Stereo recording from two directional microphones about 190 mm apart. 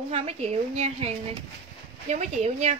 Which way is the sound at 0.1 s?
35° right (ahead or behind).